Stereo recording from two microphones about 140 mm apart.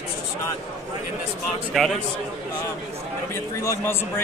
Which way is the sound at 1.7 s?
Centre (ahead or behind).